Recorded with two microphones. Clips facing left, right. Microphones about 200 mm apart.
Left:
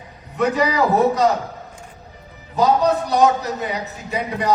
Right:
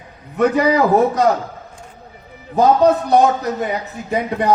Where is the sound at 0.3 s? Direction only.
55° right (ahead or behind).